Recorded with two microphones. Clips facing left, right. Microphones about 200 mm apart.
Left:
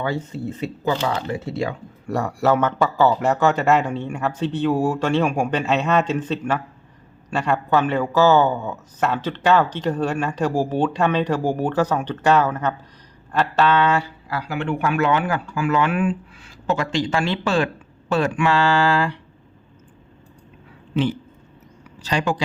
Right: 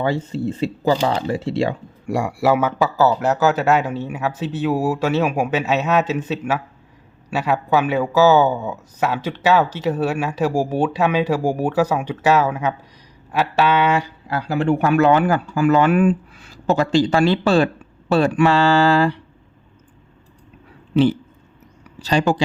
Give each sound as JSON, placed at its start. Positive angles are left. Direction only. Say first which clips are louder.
{"t": 0.0, "sound": "speech", "louder": "right 4 dB", "side_deg": -30}
{"t": 2.0, "sound": "speech", "louder": "right 1 dB", "side_deg": -10}
{"t": 14.3, "sound": "speech", "louder": "right 6 dB", "side_deg": -30}
{"t": 22.0, "sound": "speech", "louder": "right 4 dB", "side_deg": -35}